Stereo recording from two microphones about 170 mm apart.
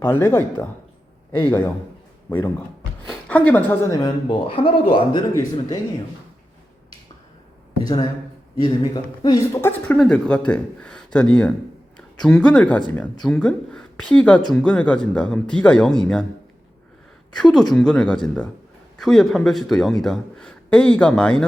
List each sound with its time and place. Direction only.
0.0 s speech: 15° left (ahead or behind)
3.1 s a woman's voice: 10° left (ahead or behind)
4.3 s a man's voice: 30° left (ahead or behind)
5.3 s a man's voice: 20° left (ahead or behind)
7.9 s a man's voice: 25° left (ahead or behind); by 16.2 s 5° left (ahead or behind)
17.3 s speech: 5° left (ahead or behind)